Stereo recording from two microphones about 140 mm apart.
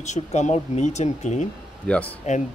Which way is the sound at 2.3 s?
60° left (ahead or behind).